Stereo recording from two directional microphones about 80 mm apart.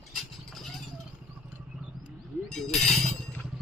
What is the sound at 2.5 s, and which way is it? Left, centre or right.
Speech, centre.